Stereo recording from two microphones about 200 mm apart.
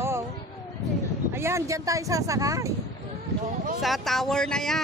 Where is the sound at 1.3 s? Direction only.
15° right (ahead or behind).